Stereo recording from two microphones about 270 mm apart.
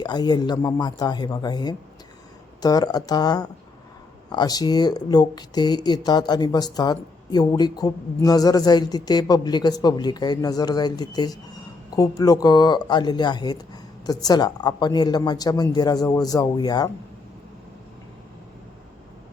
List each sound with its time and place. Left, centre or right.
0.0 s speech: centre